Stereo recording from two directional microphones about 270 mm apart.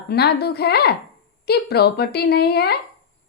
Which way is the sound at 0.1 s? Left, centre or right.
Left.